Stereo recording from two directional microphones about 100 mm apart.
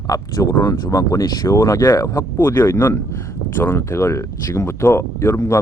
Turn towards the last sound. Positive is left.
turn(degrees=30)  # may be behind; listen again after turning